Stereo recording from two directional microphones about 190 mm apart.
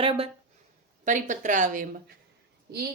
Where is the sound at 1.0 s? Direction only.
40° right (ahead or behind).